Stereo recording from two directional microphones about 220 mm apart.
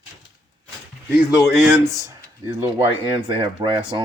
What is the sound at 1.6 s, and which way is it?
Speech, 10° right (ahead or behind).